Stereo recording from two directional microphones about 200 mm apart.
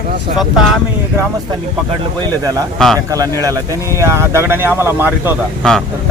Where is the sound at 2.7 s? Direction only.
Centre (ahead or behind).